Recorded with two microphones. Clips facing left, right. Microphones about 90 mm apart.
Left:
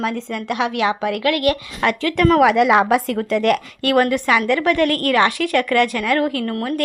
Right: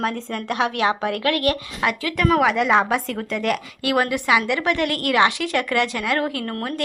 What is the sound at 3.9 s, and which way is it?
A woman's voice, 15° right (ahead or behind).